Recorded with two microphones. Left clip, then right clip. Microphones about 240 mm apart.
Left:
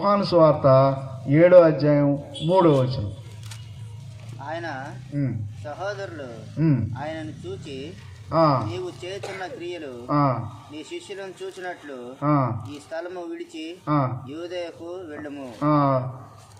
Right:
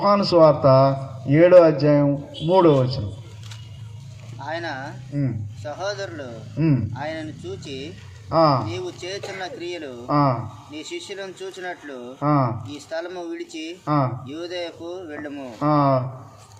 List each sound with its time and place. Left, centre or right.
0.0 s speech: right
4.4 s speech: right
15.5 s speech: right